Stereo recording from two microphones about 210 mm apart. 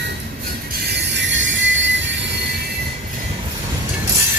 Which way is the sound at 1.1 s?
60° right (ahead or behind).